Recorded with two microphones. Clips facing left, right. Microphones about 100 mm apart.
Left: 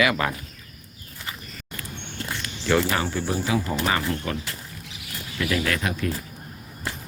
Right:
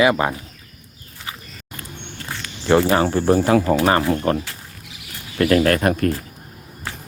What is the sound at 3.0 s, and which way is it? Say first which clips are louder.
Speech: right 10 dB; 50° right (ahead or behind).